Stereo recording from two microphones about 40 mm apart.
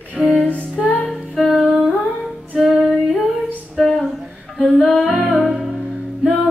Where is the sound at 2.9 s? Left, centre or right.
Centre.